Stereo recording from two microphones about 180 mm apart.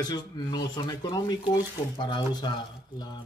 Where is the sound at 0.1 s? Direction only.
25° left (ahead or behind).